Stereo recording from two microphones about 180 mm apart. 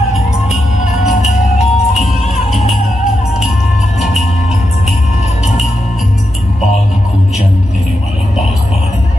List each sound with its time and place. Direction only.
1.6 s music: 40° left (ahead or behind)